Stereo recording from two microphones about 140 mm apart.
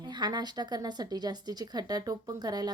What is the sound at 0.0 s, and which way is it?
Speech, 30° right (ahead or behind).